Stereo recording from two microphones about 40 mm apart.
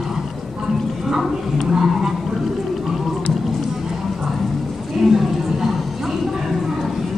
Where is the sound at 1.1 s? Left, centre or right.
Centre.